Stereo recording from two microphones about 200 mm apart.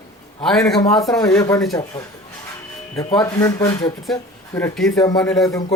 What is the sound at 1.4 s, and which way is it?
Speech, 15° left (ahead or behind).